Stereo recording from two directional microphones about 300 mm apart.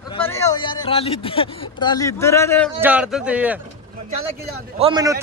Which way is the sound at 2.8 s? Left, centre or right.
Centre.